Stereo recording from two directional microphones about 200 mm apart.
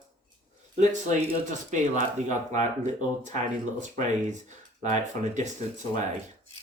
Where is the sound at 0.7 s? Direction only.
40° right (ahead or behind).